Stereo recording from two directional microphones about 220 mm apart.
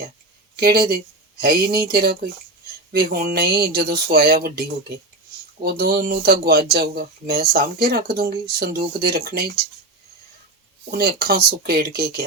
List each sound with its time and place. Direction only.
0.5 s speech: 45° right (ahead or behind)
10.9 s speech: 45° right (ahead or behind)